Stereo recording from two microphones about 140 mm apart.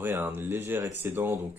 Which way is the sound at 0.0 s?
15° right (ahead or behind).